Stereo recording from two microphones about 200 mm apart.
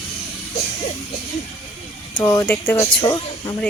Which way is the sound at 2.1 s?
15° left (ahead or behind).